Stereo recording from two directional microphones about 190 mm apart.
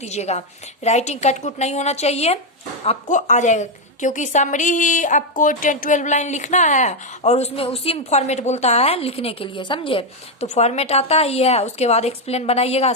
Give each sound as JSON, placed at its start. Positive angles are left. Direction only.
{"t": 0.0, "sound": "a woman's voice", "side_deg": 35}